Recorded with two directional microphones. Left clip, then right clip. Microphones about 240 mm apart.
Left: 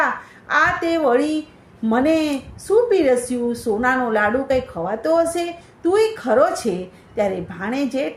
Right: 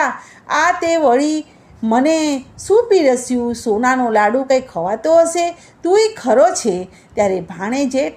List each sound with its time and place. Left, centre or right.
0.0 s a woman's voice: right